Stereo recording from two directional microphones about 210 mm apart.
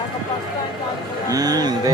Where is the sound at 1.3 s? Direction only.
15° right (ahead or behind).